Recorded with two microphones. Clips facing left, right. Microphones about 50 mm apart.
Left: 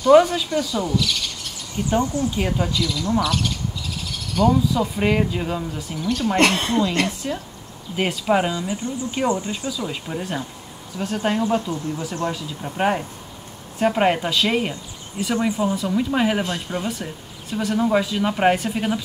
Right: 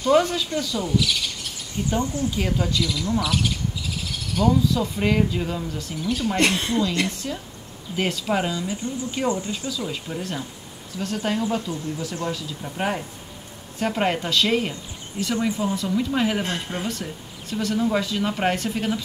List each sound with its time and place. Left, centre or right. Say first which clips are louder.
0.1 s speech: left 6 dB; centre
0.9 s bird: even; centre
1.9 s speech: left 4 dB; left
2.3 s speech: left 1 dB; centre
2.8 s speech: left 2 dB; centre
4.0 s owl: left 4 dB; centre
4.5 s speech: left 1 dB; centre
5.9 s speech: left 2 dB; centre
6.4 s speech: left 3 dB; left
7.2 s speech: left 3 dB; centre
9.7 s speech: left 2 dB; centre
11.7 s speech: left 3 dB; left
12.3 s speech: left 2 dB; centre